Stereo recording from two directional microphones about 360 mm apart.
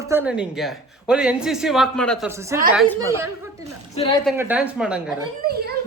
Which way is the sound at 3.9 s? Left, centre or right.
Centre.